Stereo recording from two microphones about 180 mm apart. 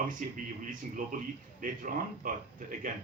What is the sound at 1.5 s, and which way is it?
Speech, 50° right (ahead or behind).